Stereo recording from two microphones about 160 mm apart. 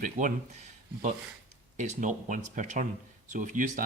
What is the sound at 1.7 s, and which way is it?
Speech, 50° right (ahead or behind).